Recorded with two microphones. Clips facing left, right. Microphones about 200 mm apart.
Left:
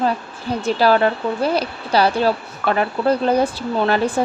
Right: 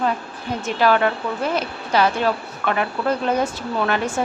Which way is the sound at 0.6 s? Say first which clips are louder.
Left 3 dB; 35° left (ahead or behind).